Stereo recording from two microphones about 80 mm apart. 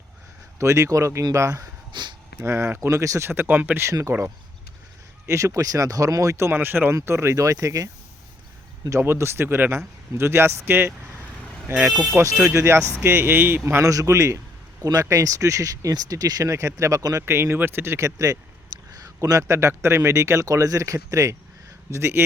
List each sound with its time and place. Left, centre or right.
0.6 s a man's voice: right
1.9 s a sound: right
2.4 s a man's voice: right
3.2 s speech: right
4.1 s a man's voice: right
9.0 s a man's voice: right
11.4 s vehicle: centre
12.2 s a man's voice: right
13.8 s a man's voice: right
16.5 s a man's voice: right
17.2 s a man's voice: right